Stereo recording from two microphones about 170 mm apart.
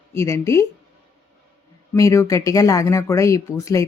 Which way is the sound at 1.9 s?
20° left (ahead or behind).